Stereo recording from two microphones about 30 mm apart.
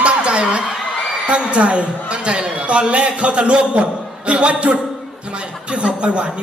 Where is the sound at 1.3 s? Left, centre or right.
Right.